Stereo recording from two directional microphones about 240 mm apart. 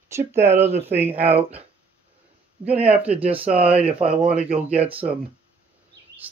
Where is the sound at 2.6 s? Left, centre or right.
Centre.